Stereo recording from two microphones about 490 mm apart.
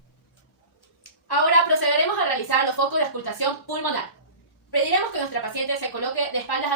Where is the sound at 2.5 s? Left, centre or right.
Left.